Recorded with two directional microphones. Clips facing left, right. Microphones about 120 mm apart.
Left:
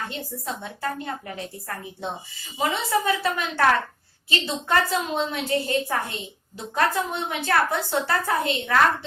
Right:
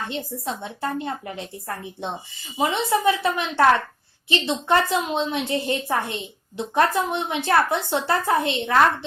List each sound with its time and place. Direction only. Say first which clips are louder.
0.1 s a woman's voice: right 3 dB; 25° right (ahead or behind)